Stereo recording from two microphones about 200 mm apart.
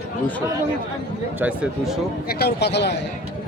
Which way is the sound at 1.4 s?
5° right (ahead or behind).